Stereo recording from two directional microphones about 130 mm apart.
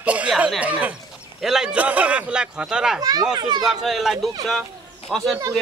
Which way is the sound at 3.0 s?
30° right (ahead or behind).